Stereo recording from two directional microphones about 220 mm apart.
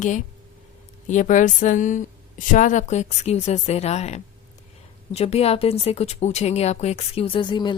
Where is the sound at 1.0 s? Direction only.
35° left (ahead or behind).